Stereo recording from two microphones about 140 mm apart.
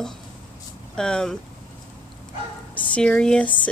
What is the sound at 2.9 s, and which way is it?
Speech, 5° left (ahead or behind).